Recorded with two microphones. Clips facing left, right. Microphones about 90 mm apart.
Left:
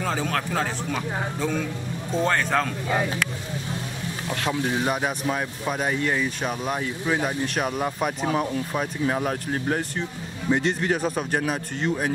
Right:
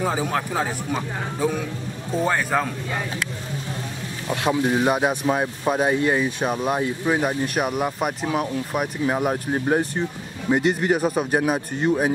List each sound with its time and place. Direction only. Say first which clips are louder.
0.0 s speech: right 3 dB; 15° right (ahead or behind)
4.3 s speech: right 5 dB; 20° right (ahead or behind)
10.5 s speech: right 3 dB; 10° right (ahead or behind)